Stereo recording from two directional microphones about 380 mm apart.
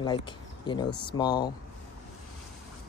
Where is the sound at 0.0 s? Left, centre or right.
Centre.